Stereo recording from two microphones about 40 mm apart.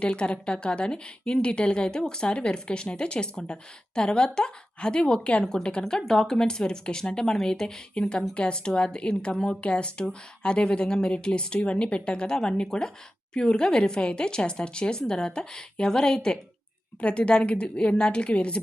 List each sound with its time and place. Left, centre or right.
0.0 s speech: left
5.8 s speech: centre
17.0 s speech: left